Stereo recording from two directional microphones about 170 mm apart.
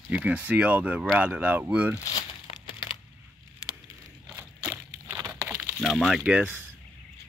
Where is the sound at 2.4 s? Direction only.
30° left (ahead or behind).